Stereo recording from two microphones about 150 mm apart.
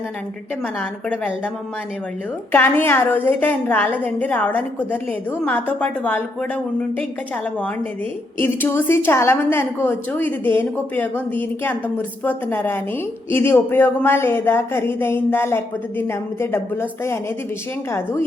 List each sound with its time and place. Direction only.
2.5 s a woman's voice: 15° left (ahead or behind)
8.4 s a woman's voice: 15° left (ahead or behind)